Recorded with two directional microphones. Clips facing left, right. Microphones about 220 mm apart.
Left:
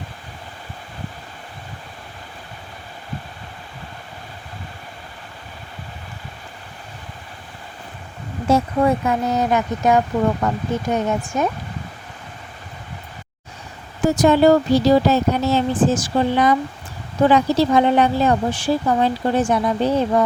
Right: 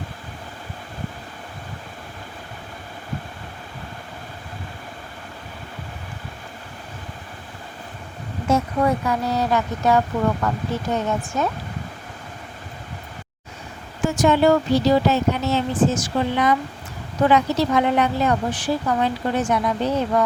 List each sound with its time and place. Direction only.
8.4 s speech: 30° left (ahead or behind)
14.0 s speech: 35° left (ahead or behind)